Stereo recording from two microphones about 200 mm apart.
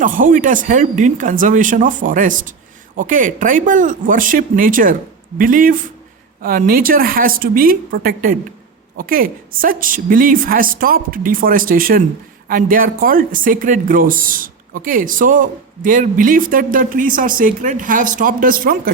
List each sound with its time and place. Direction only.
0.0 s speech: 45° right (ahead or behind)